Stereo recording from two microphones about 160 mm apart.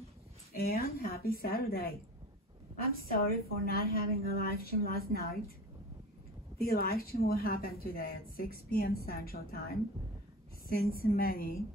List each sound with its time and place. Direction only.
0.5 s a woman's voice: 70° left (ahead or behind)
6.6 s a woman's voice: 70° left (ahead or behind)
11.0 s a woman's voice: 70° left (ahead or behind)